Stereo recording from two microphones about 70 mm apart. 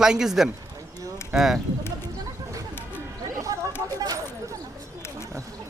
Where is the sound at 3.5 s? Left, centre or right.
Right.